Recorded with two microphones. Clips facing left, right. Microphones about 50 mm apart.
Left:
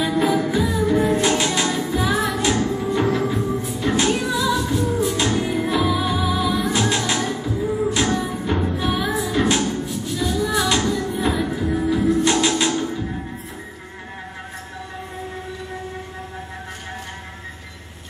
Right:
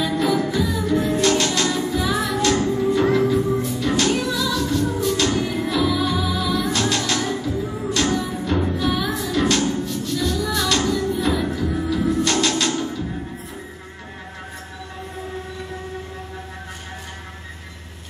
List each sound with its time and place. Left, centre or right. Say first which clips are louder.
0.0 s music: left 1 dB; centre
3.8 s music: left 2 dB; centre